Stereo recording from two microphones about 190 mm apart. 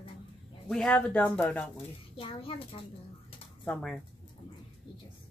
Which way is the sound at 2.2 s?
30° left (ahead or behind).